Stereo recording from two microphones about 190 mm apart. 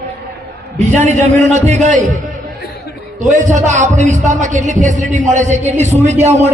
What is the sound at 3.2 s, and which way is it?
A man's voice, 40° right (ahead or behind).